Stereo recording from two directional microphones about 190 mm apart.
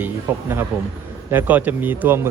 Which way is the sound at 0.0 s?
10° right (ahead or behind).